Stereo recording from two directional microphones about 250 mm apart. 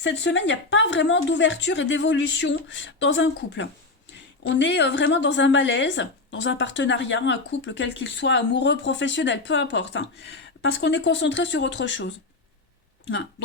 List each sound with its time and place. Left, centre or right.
0.0 s a woman's voice: left